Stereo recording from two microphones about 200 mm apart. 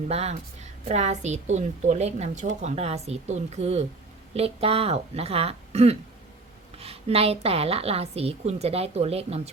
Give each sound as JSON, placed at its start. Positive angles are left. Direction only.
{"t": 0.1, "sound": "a woman's voice", "side_deg": -30}